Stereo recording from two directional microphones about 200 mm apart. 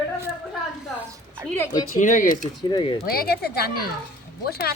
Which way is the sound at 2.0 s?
40° left (ahead or behind).